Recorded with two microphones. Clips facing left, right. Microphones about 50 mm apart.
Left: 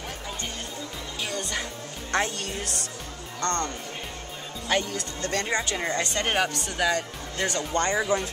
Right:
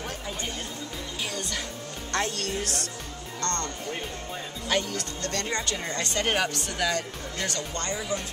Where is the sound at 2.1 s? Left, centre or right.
Centre; by 8.0 s left.